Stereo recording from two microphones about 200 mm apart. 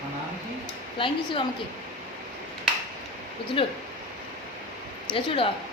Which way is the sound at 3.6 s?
25° left (ahead or behind).